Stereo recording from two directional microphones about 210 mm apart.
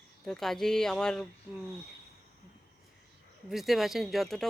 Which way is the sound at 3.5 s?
Centre (ahead or behind).